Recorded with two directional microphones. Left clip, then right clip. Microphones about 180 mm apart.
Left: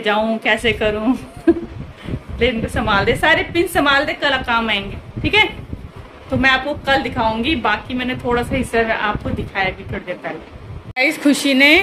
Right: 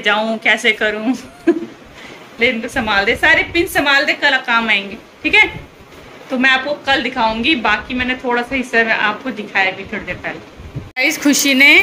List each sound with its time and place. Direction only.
0.0 s a woman's voice: 10° left (ahead or behind)